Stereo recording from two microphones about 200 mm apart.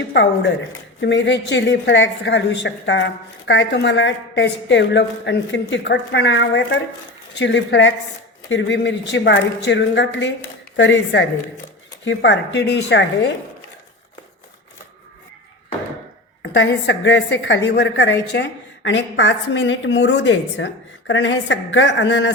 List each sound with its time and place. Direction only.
0.1 s a woman's voice: 60° left (ahead or behind)
16.4 s a woman's voice: 65° left (ahead or behind)